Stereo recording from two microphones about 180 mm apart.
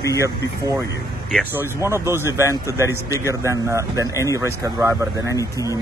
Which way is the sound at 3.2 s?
15° right (ahead or behind).